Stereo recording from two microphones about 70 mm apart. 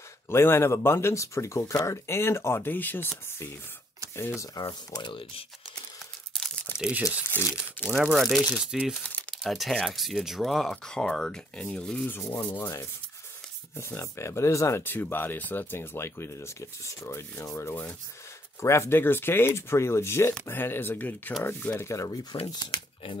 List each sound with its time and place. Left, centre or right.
0.3 s speech: left
4.6 s speech: left
6.8 s speech: centre
7.2 s speech: left
7.9 s speech: centre
8.2 s speech: centre
8.5 s speech: centre
9.3 s speech: centre
12.4 s speech: left
14.8 s speech: left
22.1 s speech: left